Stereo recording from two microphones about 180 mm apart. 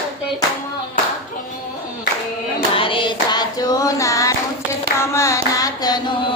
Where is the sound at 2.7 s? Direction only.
30° left (ahead or behind).